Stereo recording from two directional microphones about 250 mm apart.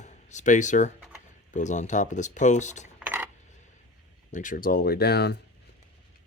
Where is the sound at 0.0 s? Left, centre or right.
Left.